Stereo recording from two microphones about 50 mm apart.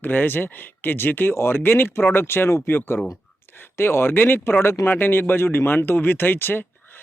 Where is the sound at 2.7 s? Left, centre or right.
Left.